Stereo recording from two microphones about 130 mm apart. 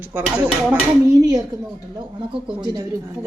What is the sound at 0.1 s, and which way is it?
Speech, 10° right (ahead or behind).